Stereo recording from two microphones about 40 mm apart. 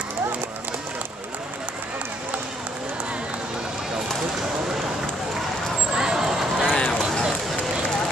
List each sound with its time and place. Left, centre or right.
5.9 s vehicle: centre
6.7 s run: left